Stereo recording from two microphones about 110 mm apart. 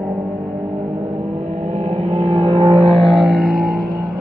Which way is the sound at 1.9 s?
70° right (ahead or behind).